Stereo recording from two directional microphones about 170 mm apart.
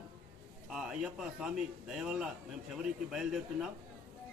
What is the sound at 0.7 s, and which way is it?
A man's voice, 5° right (ahead or behind).